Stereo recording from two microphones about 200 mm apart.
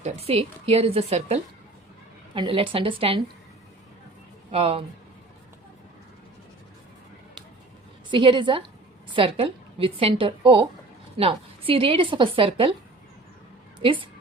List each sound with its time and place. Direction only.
0.0 s a woman's voice: 30° right (ahead or behind)
4.5 s a woman's voice: 30° right (ahead or behind)
8.1 s a woman's voice: 25° right (ahead or behind)
13.7 s a woman's voice: 25° right (ahead or behind)